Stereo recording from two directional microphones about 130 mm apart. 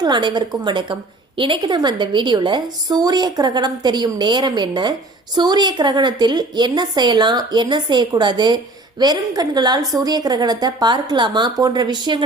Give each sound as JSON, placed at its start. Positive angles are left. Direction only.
{"t": 0.0, "sound": "a woman's voice", "side_deg": -35}